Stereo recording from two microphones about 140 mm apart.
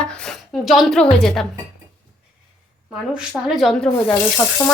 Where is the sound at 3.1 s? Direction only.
Centre (ahead or behind).